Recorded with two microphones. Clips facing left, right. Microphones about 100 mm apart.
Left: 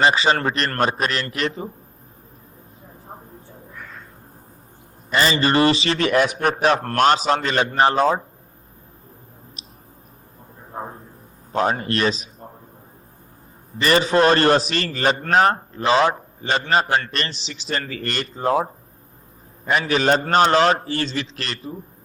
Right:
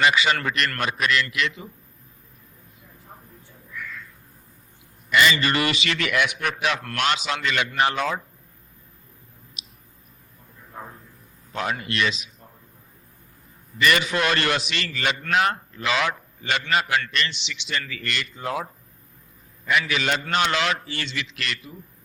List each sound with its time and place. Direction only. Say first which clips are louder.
0.0 s a man's voice: left 3 dB; 35° left (ahead or behind)
2.8 s crow: left 7 dB; 35° left (ahead or behind)
5.1 s a man's voice: left 2 dB; 35° left (ahead or behind)
9.6 s a sound: left 5 dB; 35° left (ahead or behind)
11.5 s a man's voice: left 6 dB; 35° left (ahead or behind)
13.7 s a man's voice: left 5 dB; 35° left (ahead or behind)